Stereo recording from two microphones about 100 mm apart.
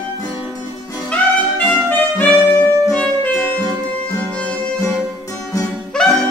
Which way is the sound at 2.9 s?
15° left (ahead or behind).